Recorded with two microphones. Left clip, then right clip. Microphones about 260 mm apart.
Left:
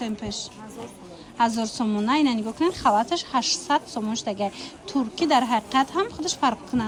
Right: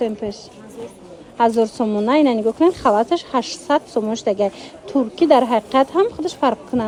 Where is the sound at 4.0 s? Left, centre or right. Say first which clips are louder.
Right 10 dB; right.